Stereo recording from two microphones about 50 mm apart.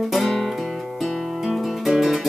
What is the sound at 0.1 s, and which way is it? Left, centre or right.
Music, centre.